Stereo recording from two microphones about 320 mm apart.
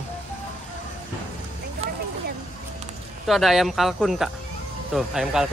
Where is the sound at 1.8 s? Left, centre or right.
Centre.